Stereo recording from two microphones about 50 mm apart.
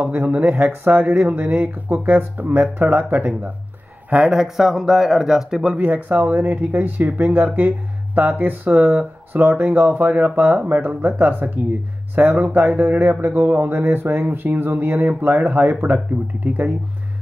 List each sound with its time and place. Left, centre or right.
0.0 s speech: right
4.2 s speech: centre
5.8 s speech: right
10.0 s speech: right